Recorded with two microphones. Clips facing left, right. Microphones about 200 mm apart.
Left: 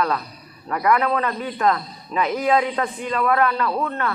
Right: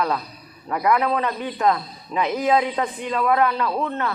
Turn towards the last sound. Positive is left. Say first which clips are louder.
# even
turn(degrees=-20)  # may be behind; listen again after turning